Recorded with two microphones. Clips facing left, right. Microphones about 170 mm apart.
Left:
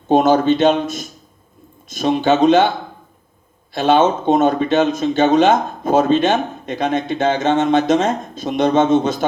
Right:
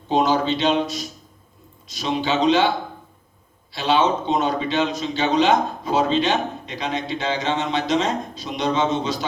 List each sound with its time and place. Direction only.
0.1 s a man's voice: 50° left (ahead or behind)